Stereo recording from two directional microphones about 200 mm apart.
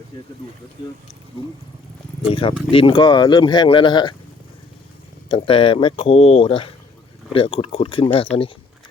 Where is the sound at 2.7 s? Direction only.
25° left (ahead or behind).